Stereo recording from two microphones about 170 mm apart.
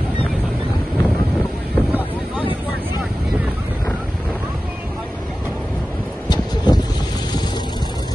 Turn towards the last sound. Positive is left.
turn(degrees=25)  # may be behind; listen again after turning